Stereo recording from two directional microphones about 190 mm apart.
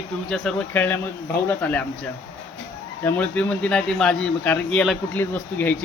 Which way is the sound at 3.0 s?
10° left (ahead or behind).